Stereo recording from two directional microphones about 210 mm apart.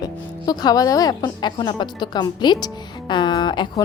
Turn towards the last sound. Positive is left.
turn(degrees=20)  # may be behind; listen again after turning